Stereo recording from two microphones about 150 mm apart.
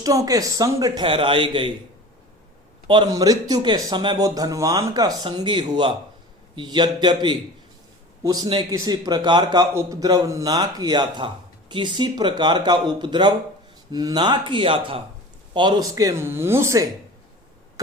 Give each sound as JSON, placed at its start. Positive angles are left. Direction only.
{"t": 0.0, "sound": "speech", "side_deg": -25}
{"t": 2.8, "sound": "speech", "side_deg": -35}